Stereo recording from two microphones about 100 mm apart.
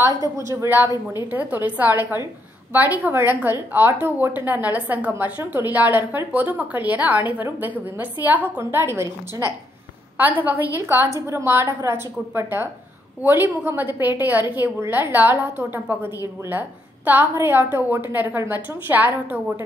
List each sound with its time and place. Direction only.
0.2 s a woman's voice: 30° right (ahead or behind)
0.8 s a woman's voice: 40° left (ahead or behind)
1.3 s a woman's voice: 15° right (ahead or behind)